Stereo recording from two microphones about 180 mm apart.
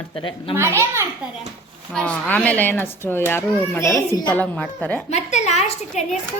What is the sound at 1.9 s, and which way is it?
Speech, 5° left (ahead or behind).